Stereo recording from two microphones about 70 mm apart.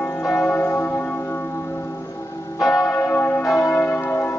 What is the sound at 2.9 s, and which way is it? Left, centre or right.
Church bell, left.